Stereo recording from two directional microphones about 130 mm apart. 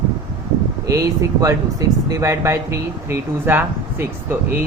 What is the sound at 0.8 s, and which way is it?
Speech, 25° right (ahead or behind).